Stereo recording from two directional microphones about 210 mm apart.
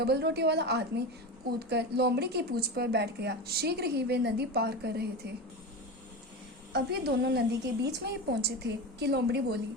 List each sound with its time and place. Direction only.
0.0 s speech: 50° right (ahead or behind)
6.7 s speech: 50° right (ahead or behind)